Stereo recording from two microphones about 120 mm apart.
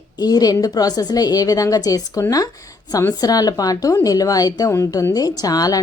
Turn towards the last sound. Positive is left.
turn(degrees=30)  # may be behind; listen again after turning